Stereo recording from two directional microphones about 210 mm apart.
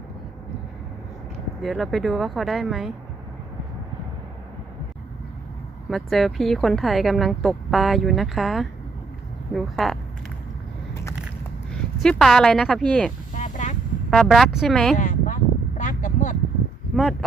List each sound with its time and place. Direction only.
1.6 s speech: centre (ahead or behind)
5.9 s speech: centre (ahead or behind)
12.0 s speech: 5° left (ahead or behind)
13.3 s vehicle: 35° left (ahead or behind)
14.1 s speech: centre (ahead or behind)
14.9 s a sound: 40° left (ahead or behind)
16.9 s speech: centre (ahead or behind)